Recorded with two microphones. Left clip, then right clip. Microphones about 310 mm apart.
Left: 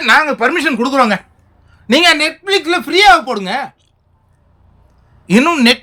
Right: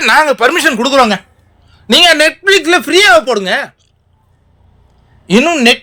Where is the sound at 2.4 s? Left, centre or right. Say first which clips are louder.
Right 6 dB; centre.